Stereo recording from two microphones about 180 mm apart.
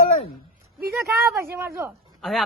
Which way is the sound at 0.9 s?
15° right (ahead or behind).